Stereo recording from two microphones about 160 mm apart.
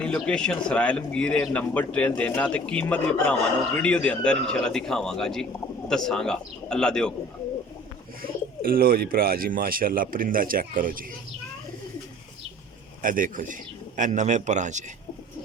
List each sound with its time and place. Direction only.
0.0 s speech: 5° left (ahead or behind)
8.7 s speech: 65° right (ahead or behind)
13.0 s speech: 60° right (ahead or behind)